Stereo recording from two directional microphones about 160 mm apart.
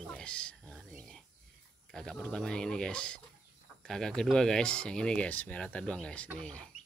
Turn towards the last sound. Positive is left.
turn(degrees=5)  # may be behind; listen again after turning